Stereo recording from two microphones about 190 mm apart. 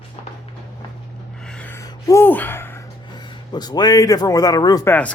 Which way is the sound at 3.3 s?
20° left (ahead or behind).